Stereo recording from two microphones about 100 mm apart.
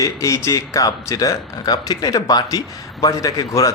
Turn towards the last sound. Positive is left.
turn(degrees=35)  # may be behind; listen again after turning